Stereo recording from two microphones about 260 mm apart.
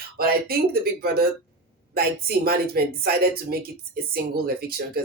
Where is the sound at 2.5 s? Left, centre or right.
Right.